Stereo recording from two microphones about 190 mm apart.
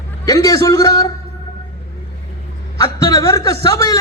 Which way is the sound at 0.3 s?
20° left (ahead or behind).